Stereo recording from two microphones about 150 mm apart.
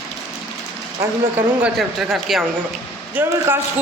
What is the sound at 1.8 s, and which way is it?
A man's voice, centre (ahead or behind).